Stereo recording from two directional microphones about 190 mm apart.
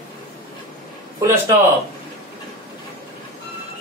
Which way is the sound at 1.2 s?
20° right (ahead or behind).